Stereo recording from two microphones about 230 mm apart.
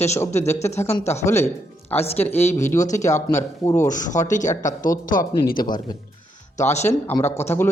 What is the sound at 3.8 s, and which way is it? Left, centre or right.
Speech, left.